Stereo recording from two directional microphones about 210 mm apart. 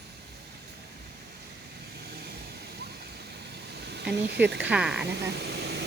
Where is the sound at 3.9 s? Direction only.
55° right (ahead or behind).